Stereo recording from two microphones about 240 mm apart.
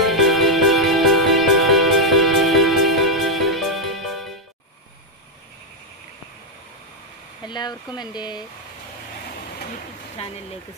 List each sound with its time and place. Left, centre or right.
0.0 s music: centre
7.4 s speech: centre